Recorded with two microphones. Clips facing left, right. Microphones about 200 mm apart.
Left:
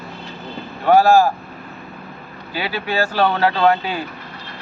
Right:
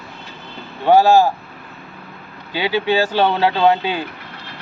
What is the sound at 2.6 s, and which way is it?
Speech, 20° right (ahead or behind).